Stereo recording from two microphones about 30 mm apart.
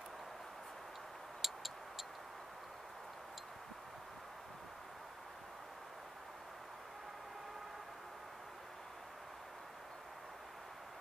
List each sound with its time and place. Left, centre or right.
1.4 s vehicle: centre